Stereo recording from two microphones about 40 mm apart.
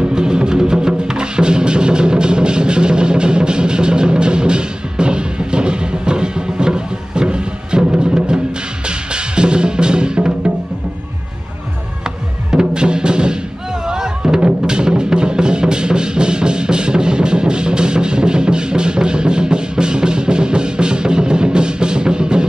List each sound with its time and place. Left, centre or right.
0.0 s music: centre
12.0 s music: centre